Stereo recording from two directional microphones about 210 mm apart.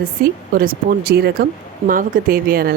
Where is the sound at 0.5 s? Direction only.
45° right (ahead or behind).